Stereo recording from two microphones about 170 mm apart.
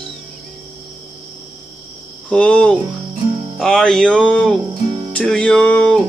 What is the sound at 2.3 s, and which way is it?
Speech, 5° left (ahead or behind).